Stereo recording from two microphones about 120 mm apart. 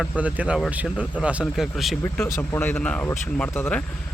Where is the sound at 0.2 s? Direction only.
10° right (ahead or behind).